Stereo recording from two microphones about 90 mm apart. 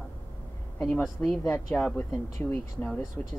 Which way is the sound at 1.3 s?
30° left (ahead or behind).